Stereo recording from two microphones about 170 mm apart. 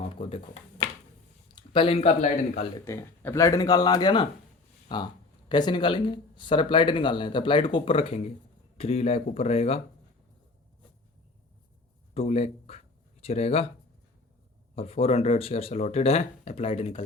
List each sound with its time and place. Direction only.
0.2 s speech: 30° left (ahead or behind)
1.5 s speech: 30° left (ahead or behind)
2.8 s speech: 15° left (ahead or behind); by 9.8 s 35° left (ahead or behind)
12.1 s speech: 35° left (ahead or behind)
14.8 s speech: 35° left (ahead or behind)